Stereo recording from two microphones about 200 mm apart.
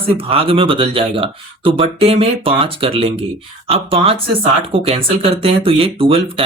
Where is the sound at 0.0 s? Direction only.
30° right (ahead or behind).